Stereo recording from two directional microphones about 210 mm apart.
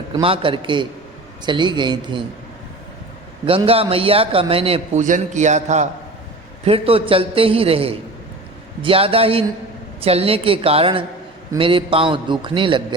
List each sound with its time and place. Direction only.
0.1 s a man's voice: 25° right (ahead or behind)
3.4 s a man's voice: 25° right (ahead or behind)